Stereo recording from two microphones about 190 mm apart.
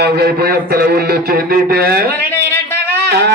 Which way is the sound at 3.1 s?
60° right (ahead or behind).